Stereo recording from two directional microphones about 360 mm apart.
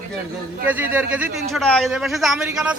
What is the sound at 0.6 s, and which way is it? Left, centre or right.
A man's voice, centre.